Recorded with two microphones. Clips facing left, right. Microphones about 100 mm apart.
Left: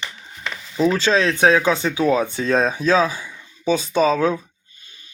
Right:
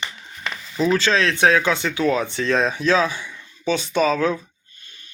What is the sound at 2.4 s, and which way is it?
Speech, 40° left (ahead or behind).